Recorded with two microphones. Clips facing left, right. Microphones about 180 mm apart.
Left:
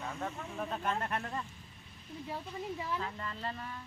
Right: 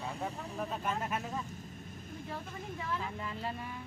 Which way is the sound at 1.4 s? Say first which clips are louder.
Right 4 dB; 45° right (ahead or behind).